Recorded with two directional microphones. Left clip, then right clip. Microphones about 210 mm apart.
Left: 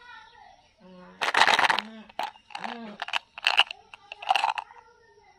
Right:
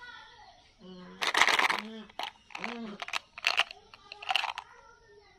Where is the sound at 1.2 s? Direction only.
15° left (ahead or behind); by 4.6 s 30° left (ahead or behind).